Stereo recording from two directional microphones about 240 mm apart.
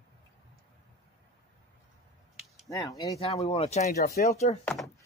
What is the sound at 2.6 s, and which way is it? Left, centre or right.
Speech, centre.